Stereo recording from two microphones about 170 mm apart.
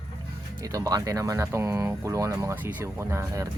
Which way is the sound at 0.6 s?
20° right (ahead or behind).